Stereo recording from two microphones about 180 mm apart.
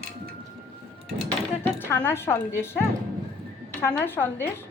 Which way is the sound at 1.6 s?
10° left (ahead or behind).